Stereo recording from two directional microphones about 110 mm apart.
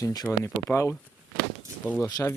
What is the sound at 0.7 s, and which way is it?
Speech, 5° left (ahead or behind).